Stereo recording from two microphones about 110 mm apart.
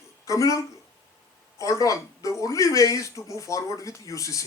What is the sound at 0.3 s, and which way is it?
Speech, 30° left (ahead or behind).